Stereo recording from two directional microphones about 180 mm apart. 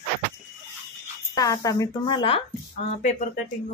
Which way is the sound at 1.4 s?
20° left (ahead or behind).